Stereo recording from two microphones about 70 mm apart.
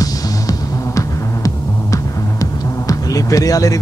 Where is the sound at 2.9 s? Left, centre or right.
Left.